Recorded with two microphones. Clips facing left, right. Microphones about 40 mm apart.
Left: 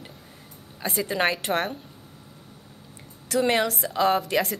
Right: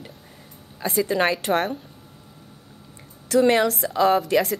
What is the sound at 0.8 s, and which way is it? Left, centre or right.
Speech, left.